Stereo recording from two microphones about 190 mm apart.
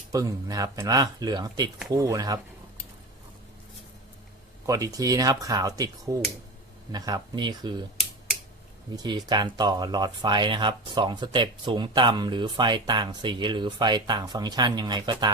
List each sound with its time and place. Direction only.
0.1 s speech: 20° right (ahead or behind)
4.6 s speech: 15° right (ahead or behind)
6.9 s speech: 20° right (ahead or behind)
9.0 s speech: 20° right (ahead or behind)